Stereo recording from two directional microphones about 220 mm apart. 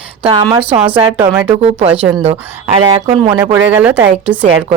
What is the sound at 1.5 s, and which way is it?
Speech, 30° right (ahead or behind).